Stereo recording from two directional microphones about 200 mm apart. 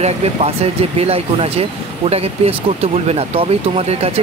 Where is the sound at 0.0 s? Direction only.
30° right (ahead or behind).